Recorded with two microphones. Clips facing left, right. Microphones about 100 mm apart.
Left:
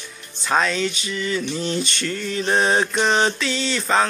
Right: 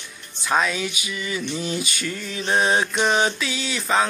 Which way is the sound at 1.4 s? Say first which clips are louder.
Left 2 dB; 5° right (ahead or behind).